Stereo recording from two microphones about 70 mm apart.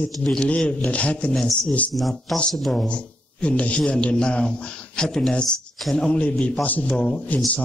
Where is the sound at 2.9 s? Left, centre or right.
Centre.